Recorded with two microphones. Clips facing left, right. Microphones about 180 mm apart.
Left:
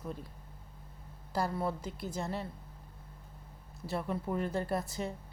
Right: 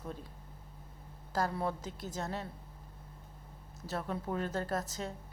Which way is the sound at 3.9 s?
10° left (ahead or behind).